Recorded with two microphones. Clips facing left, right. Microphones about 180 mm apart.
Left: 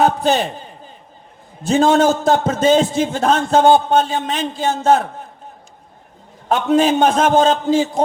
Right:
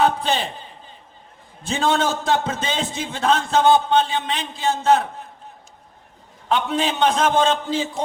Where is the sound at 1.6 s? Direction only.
45° left (ahead or behind).